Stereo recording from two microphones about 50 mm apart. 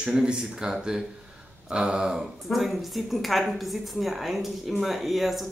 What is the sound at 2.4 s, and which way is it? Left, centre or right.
Speech, centre.